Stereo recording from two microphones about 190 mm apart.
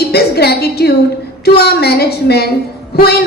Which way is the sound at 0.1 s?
55° left (ahead or behind).